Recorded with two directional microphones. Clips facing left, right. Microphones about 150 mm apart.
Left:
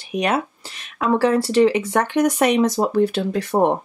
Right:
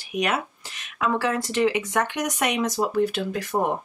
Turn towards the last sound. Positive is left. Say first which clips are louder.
# left 6 dB
turn(degrees=30)  # may be behind; listen again after turning